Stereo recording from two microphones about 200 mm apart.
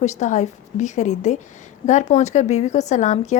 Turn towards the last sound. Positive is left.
turn(degrees=35)  # may be behind; listen again after turning